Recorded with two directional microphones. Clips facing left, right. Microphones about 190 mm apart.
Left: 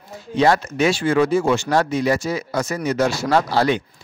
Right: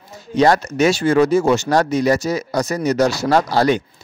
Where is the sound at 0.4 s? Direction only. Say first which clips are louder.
Right 3 dB; 45° right (ahead or behind).